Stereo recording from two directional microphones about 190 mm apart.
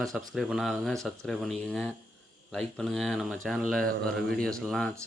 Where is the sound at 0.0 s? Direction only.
Centre (ahead or behind).